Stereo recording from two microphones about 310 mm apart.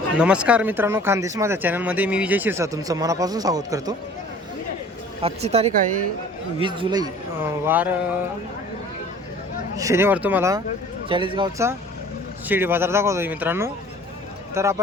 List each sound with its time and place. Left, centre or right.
0.2 s speech: centre
5.2 s speech: centre
9.7 s speech: centre